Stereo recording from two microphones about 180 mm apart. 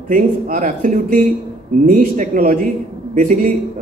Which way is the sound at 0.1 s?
50° right (ahead or behind).